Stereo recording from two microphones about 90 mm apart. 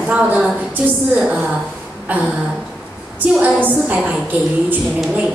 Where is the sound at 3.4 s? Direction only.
20° right (ahead or behind).